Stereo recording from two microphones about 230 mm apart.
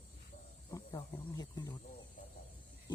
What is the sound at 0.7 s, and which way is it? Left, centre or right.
Wild animals, centre.